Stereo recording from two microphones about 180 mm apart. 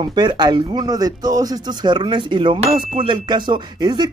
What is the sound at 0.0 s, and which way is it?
Speech, 25° right (ahead or behind).